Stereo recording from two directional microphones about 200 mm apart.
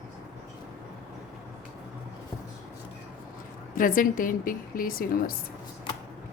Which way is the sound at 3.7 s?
45° left (ahead or behind).